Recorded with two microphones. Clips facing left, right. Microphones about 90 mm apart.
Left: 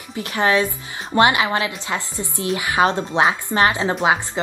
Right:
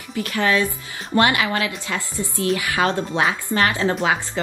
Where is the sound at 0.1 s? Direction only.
25° left (ahead or behind).